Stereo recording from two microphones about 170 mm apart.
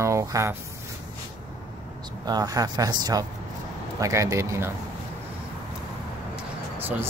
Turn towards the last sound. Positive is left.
turn(degrees=-10)  # may be behind; listen again after turning